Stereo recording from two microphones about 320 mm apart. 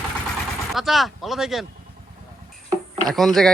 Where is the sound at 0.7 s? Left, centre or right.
Centre.